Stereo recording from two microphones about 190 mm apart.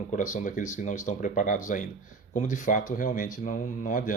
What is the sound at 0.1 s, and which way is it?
Speech, 40° left (ahead or behind).